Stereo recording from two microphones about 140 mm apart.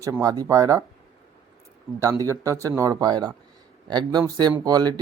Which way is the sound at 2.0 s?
20° right (ahead or behind).